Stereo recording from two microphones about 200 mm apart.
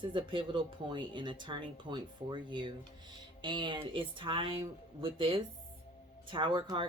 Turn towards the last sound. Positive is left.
turn(degrees=-25)  # may be behind; listen again after turning